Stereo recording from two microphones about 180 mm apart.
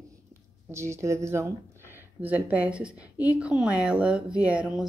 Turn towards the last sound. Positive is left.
turn(degrees=-5)  # may be behind; listen again after turning